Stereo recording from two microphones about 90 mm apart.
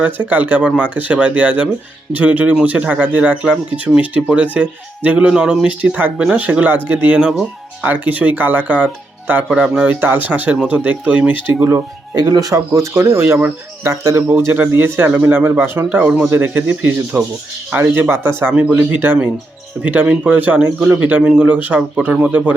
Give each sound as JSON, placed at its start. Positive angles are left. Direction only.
{"t": 0.0, "sound": "speech", "side_deg": -20}
{"t": 9.5, "sound": "speech", "side_deg": -10}
{"t": 12.3, "sound": "speech", "side_deg": -40}
{"t": 14.2, "sound": "speech", "side_deg": -25}